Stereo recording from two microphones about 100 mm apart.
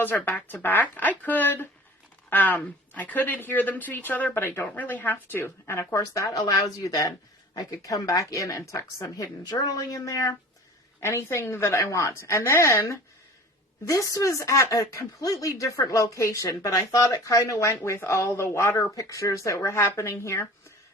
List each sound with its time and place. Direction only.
0.3 s a woman's voice: 15° left (ahead or behind)